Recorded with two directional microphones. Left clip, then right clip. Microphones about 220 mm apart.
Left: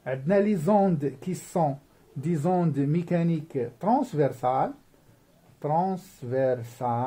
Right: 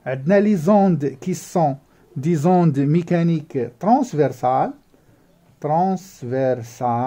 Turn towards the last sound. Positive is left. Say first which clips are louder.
# right 7 dB
turn(degrees=-45)  # may be behind; listen again after turning